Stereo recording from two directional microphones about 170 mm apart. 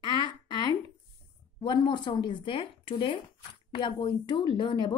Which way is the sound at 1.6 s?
30° left (ahead or behind).